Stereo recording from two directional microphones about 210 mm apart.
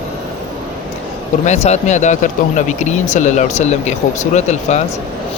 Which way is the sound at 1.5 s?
30° left (ahead or behind).